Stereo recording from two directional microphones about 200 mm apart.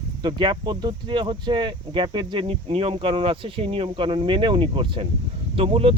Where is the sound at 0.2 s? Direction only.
25° right (ahead or behind).